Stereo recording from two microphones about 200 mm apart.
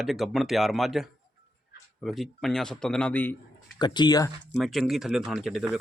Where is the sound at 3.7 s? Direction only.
20° left (ahead or behind).